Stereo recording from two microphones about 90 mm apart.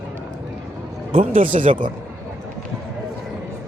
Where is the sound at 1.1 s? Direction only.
90° right.